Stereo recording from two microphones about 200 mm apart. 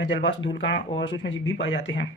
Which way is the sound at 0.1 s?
65° left (ahead or behind).